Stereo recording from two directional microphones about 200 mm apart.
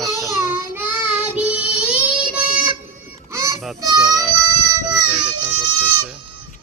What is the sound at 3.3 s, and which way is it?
Goose, 15° right (ahead or behind).